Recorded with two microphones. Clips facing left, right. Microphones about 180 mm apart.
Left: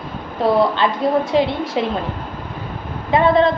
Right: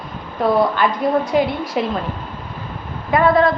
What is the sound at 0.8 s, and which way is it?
A woman's voice, 25° left (ahead or behind).